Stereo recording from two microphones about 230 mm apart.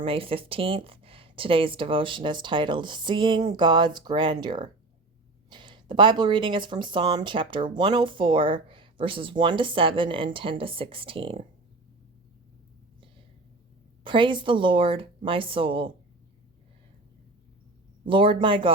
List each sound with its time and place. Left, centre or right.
0.0 s speech: right
14.0 s speech: right
18.0 s speech: right